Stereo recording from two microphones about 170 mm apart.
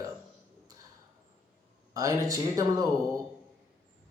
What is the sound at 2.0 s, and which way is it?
Speech, 20° right (ahead or behind).